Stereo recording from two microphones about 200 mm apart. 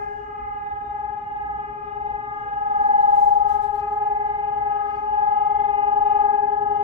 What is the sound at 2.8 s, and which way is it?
Train, 30° right (ahead or behind).